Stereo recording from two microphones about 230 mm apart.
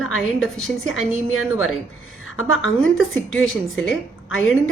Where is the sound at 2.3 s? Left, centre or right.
Left.